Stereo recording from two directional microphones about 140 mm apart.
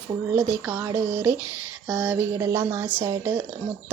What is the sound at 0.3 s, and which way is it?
Speech, 20° right (ahead or behind).